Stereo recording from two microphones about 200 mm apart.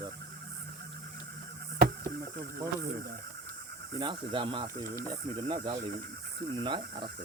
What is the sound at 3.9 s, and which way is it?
Speech, 25° right (ahead or behind).